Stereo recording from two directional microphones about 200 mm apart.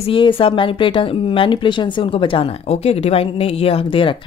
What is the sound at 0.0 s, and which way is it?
Speech, 25° left (ahead or behind).